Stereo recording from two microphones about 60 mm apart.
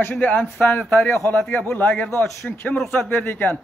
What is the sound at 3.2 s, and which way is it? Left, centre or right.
Speech, left.